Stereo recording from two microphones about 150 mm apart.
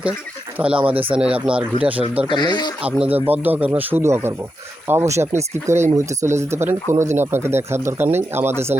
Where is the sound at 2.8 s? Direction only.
10° right (ahead or behind).